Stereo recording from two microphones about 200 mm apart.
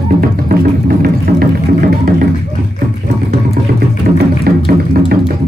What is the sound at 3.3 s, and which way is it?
Music, 50° right (ahead or behind).